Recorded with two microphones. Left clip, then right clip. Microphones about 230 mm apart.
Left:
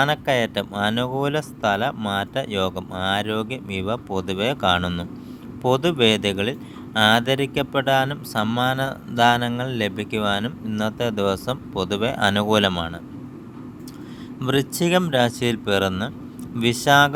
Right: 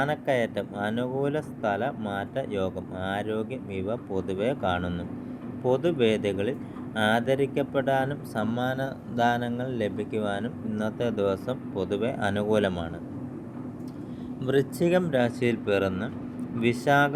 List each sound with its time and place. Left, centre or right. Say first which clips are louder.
0.0 s speech: left 6 dB; left
14.4 s speech: left 3 dB; left